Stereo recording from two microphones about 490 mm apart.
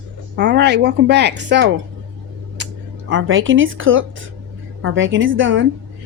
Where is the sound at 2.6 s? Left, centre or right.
Right.